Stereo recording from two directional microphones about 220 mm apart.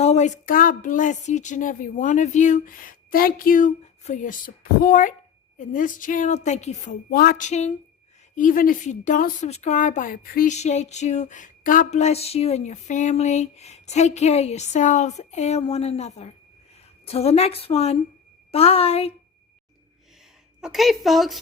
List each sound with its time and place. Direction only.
0.0 s speech: 30° left (ahead or behind)
7.1 s a woman's voice: 45° left (ahead or behind); by 19.1 s 25° left (ahead or behind)
20.6 s a woman's voice: centre (ahead or behind)